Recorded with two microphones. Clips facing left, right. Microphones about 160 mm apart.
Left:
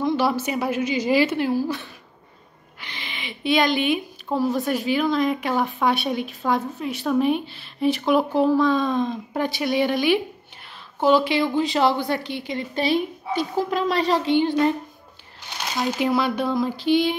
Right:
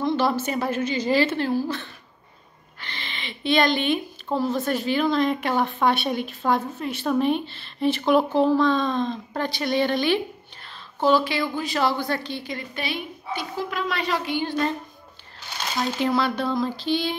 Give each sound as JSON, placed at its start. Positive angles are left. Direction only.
{"t": 0.0, "sound": "speech", "side_deg": 5}
{"t": 12.7, "sound": "a woman's voice", "side_deg": 35}
{"t": 14.3, "sound": "a woman's voice", "side_deg": 20}
{"t": 16.1, "sound": "speech", "side_deg": 15}